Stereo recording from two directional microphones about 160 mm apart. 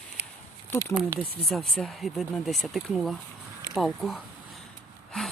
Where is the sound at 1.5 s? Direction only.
Centre (ahead or behind).